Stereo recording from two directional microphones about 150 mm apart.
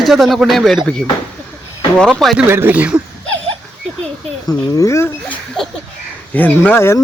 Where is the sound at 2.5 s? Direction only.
15° right (ahead or behind).